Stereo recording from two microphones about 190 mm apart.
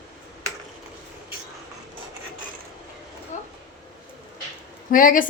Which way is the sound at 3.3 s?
40° left (ahead or behind).